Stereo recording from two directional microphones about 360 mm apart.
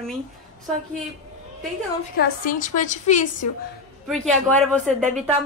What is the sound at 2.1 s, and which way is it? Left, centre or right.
A woman's voice, left.